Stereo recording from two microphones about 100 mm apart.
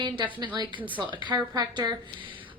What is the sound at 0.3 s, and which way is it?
Speech, 50° right (ahead or behind).